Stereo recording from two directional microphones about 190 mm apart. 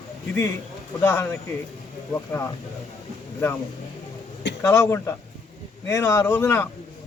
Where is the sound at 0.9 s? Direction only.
10° left (ahead or behind).